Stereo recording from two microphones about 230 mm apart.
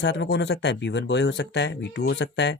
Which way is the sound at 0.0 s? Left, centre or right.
Left.